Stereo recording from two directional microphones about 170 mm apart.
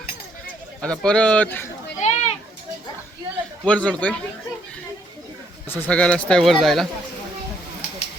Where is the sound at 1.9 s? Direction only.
40° left (ahead or behind).